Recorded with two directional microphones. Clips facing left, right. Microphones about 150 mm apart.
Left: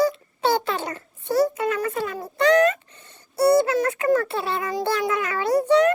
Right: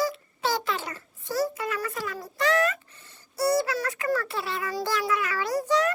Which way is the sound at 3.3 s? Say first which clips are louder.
Left 7 dB; 25° left (ahead or behind).